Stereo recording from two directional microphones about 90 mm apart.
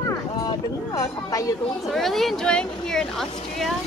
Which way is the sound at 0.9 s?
40° left (ahead or behind).